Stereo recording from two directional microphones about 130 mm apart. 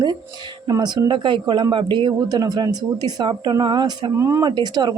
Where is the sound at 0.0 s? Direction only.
35° right (ahead or behind).